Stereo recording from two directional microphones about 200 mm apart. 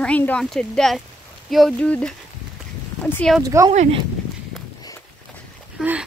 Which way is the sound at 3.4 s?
15° right (ahead or behind).